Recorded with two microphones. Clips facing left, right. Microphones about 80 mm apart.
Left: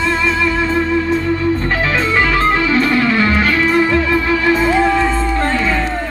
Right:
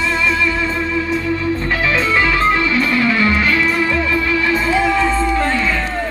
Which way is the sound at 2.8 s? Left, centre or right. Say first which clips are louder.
Left 2 dB; left.